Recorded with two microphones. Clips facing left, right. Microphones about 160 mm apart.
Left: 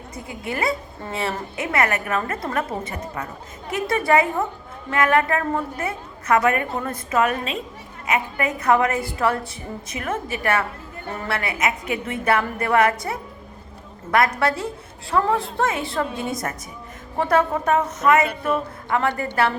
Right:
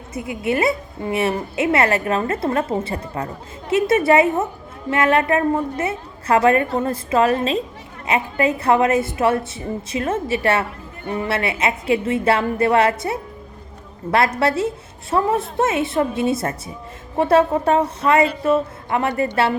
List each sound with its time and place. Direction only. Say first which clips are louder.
0.1 s a woman's voice: right 8 dB; 25° right (ahead or behind)